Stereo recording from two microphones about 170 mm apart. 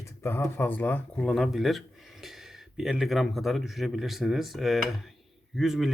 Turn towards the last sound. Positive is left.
turn(degrees=0)  # may be behind; listen again after turning